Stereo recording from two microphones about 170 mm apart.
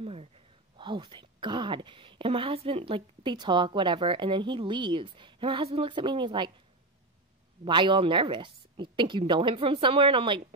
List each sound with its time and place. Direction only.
0.0 s speech: 35° right (ahead or behind)
7.6 s a woman's voice: 30° right (ahead or behind)